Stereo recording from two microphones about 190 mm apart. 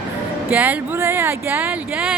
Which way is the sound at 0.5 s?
10° right (ahead or behind).